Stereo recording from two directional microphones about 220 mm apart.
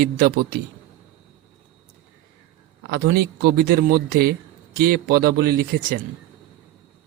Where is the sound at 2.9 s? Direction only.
45° right (ahead or behind).